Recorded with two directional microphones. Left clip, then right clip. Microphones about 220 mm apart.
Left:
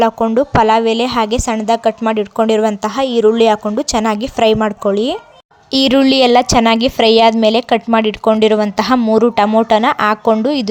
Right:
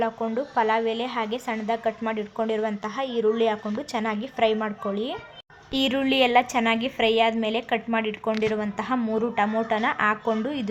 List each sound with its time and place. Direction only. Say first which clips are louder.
0.0 s a woman's voice: left 14 dB; 45° left (ahead or behind)